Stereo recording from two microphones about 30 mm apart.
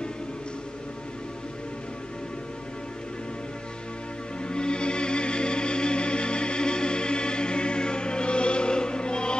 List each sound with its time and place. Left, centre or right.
4.4 s music: left